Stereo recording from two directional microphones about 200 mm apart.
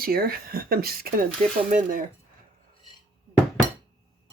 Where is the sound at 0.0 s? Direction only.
50° right (ahead or behind).